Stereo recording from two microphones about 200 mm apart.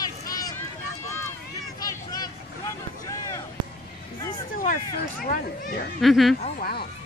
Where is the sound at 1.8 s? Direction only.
20° left (ahead or behind).